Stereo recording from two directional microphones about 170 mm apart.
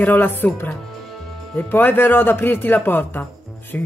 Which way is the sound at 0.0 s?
10° left (ahead or behind).